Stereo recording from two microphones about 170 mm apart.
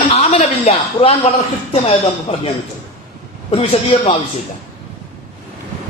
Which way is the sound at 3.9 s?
35° left (ahead or behind).